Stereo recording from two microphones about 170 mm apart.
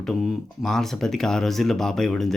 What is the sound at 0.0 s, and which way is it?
Speech, centre (ahead or behind).